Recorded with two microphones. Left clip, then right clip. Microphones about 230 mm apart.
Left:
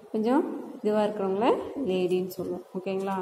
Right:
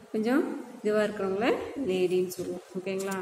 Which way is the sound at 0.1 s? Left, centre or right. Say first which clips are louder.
Left 2 dB; centre.